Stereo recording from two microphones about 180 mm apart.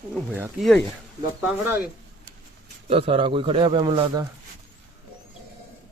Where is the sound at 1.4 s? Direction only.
10° right (ahead or behind).